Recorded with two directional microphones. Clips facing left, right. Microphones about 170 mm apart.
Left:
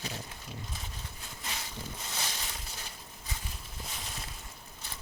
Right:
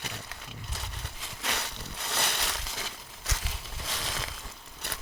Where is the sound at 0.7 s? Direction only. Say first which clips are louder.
Right 2 dB; 75° right (ahead or behind).